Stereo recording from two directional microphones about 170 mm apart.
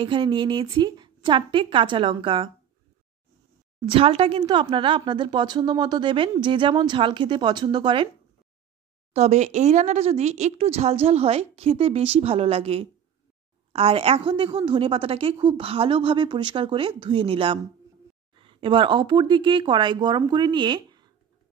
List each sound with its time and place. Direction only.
0.0 s a woman's voice: 30° right (ahead or behind)
3.9 s a woman's voice: 30° right (ahead or behind)
9.1 s a woman's voice: 40° right (ahead or behind)